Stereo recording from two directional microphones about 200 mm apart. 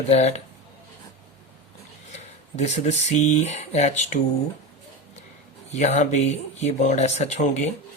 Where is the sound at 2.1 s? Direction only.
35° left (ahead or behind).